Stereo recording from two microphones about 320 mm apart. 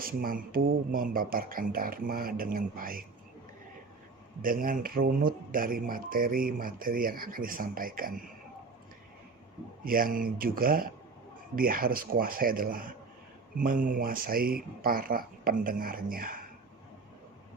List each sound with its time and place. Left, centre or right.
0.0 s speech: right
4.4 s speech: right
9.8 s speech: right